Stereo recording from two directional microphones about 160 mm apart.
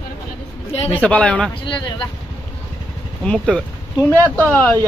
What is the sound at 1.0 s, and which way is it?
Speech, 10° left (ahead or behind).